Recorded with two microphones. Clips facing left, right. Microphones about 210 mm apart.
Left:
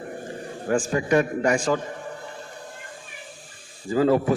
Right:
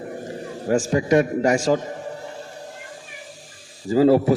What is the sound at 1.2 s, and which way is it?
Speech, 35° right (ahead or behind).